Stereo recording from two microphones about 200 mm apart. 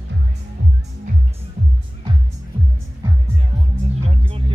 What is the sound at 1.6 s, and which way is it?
Music, 40° right (ahead or behind).